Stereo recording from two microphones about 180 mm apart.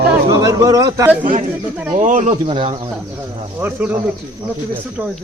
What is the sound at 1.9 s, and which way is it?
Speech, 45° right (ahead or behind).